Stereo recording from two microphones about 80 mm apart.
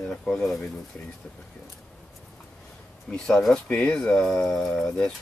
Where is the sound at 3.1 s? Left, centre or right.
Centre.